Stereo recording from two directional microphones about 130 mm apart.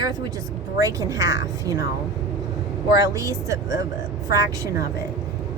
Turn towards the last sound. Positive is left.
turn(degrees=-25)  # may be behind; listen again after turning